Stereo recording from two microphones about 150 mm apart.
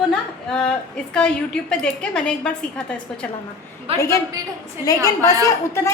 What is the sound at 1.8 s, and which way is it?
A woman's voice, 5° left (ahead or behind).